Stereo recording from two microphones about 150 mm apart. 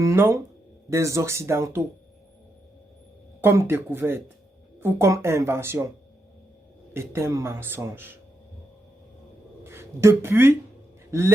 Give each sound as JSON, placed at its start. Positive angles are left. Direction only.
{"t": 0.0, "sound": "speech", "side_deg": -20}
{"t": 3.4, "sound": "speech", "side_deg": -15}
{"t": 6.9, "sound": "speech", "side_deg": -15}
{"t": 9.6, "sound": "speech", "side_deg": -15}